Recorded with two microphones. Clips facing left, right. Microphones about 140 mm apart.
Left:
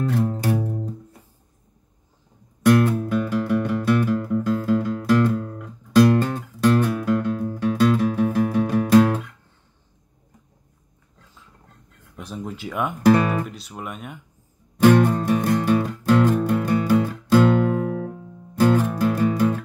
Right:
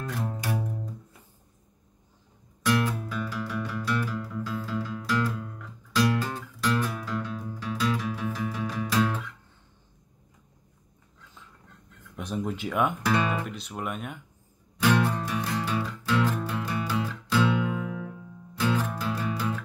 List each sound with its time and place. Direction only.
2.6 s music: 55° left (ahead or behind)
12.2 s a sound: centre (ahead or behind)
13.0 s speech: 40° left (ahead or behind)
13.5 s speech: centre (ahead or behind)
14.8 s music: 50° left (ahead or behind)